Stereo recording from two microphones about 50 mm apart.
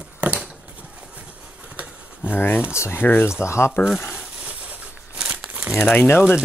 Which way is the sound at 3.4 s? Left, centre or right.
Left.